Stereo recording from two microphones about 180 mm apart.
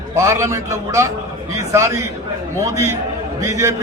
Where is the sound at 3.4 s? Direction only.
15° right (ahead or behind).